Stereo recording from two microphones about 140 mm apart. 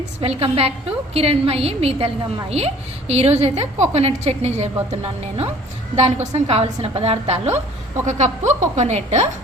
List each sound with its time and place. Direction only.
0.2 s a woman's voice: 45° right (ahead or behind)
6.0 s a woman's voice: 50° right (ahead or behind)